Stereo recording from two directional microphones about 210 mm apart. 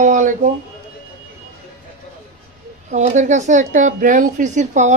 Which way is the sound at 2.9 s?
35° right (ahead or behind).